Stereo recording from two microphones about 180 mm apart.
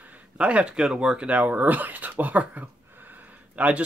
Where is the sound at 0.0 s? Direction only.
10° right (ahead or behind).